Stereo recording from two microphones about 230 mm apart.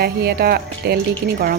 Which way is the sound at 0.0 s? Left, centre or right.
Right.